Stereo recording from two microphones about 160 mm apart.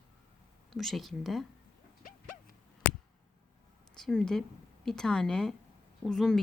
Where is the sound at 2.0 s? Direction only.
60° left (ahead or behind).